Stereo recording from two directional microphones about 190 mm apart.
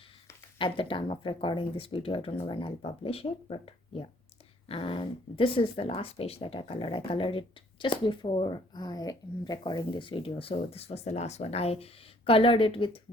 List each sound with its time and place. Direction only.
0.6 s speech: 25° left (ahead or behind)